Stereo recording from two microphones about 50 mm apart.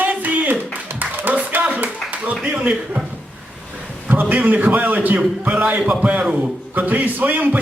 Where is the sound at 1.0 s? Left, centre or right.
Right.